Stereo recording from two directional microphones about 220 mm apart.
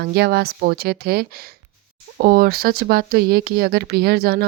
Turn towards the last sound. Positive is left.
turn(degrees=-45)  # may be behind; listen again after turning